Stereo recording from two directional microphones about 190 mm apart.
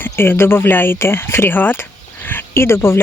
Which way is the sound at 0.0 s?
10° left (ahead or behind).